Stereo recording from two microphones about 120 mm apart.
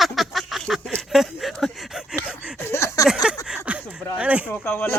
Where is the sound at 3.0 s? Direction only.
5° right (ahead or behind).